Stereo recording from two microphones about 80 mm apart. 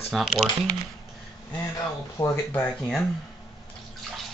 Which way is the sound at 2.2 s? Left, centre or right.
Left.